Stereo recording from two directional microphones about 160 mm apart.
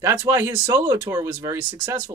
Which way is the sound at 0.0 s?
15° right (ahead or behind).